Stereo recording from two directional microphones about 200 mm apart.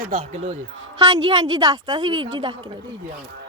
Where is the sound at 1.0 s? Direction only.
20° right (ahead or behind).